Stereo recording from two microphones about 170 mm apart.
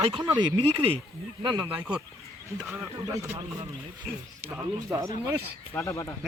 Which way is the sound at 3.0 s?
20° right (ahead or behind).